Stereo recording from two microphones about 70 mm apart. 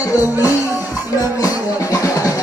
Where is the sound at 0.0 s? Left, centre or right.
Left.